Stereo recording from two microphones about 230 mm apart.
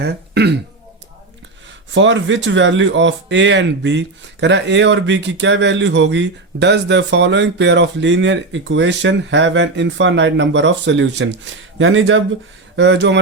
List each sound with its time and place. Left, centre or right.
0.0 s speech: right
1.9 s speech: right